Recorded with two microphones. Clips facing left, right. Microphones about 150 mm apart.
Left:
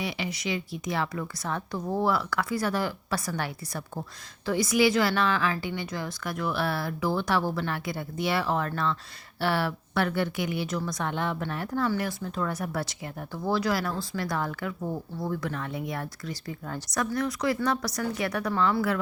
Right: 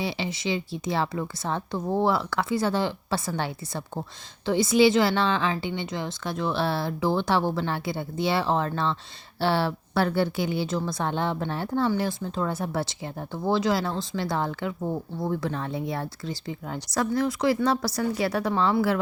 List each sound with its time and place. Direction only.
0.0 s a woman's voice: 30° right (ahead or behind)